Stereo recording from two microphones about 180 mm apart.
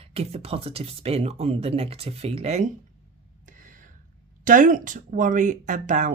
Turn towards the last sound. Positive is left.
turn(degrees=-45)  # may be behind; listen again after turning